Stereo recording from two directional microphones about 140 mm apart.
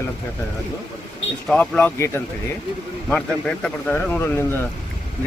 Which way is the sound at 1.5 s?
10° left (ahead or behind).